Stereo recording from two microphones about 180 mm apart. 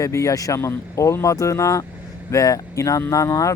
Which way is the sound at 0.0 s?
15° left (ahead or behind).